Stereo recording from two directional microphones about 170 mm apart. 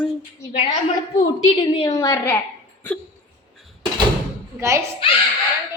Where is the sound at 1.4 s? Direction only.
30° left (ahead or behind).